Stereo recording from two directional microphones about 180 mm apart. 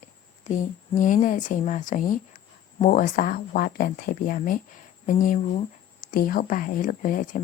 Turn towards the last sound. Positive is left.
turn(degrees=50)  # may be behind; listen again after turning